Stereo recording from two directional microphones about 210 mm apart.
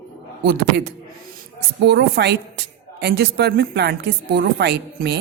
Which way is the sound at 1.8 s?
50° right (ahead or behind).